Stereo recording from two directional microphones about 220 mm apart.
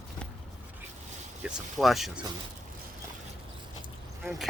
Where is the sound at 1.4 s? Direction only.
Centre (ahead or behind).